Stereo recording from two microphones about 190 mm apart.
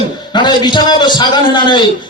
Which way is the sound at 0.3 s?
20° left (ahead or behind).